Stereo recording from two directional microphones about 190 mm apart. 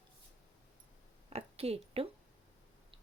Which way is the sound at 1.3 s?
30° right (ahead or behind).